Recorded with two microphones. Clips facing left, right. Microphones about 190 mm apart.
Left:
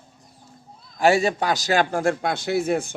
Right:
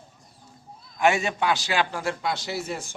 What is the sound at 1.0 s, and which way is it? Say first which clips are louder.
A man's voice: left 4 dB; 35° left (ahead or behind).